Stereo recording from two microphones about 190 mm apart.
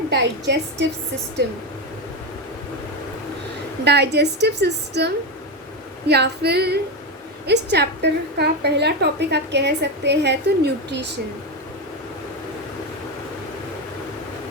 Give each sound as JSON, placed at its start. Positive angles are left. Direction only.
{"t": 0.1, "sound": "a woman's voice", "side_deg": -65}
{"t": 3.8, "sound": "a woman's voice", "side_deg": -60}